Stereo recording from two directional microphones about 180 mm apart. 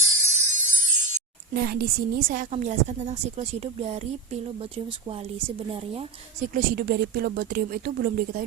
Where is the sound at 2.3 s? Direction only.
45° right (ahead or behind).